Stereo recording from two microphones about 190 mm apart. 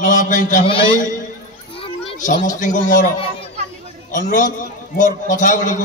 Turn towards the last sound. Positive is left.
turn(degrees=40)  # may be behind; listen again after turning